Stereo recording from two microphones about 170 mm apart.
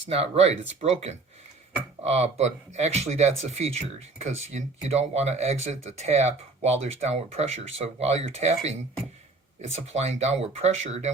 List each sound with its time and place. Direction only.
0.1 s speech: 40° right (ahead or behind)